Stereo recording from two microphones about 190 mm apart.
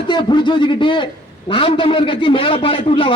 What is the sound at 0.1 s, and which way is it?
A man's voice, 25° left (ahead or behind).